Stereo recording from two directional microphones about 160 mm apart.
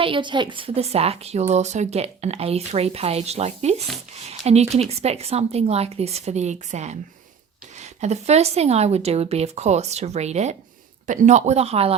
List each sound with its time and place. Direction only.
0.0 s a woman's voice: 30° right (ahead or behind)